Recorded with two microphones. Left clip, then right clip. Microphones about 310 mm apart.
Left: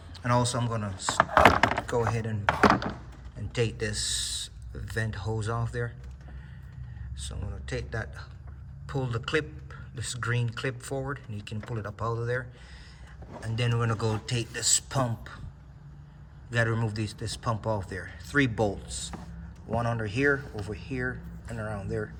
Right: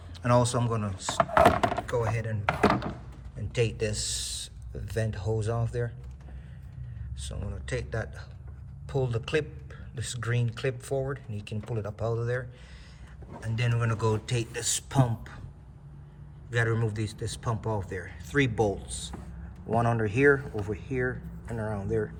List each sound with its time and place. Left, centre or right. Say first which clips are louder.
0.1 s speech: right 2 dB; centre
7.2 s speech: right 1 dB; centre
16.5 s speech: even; centre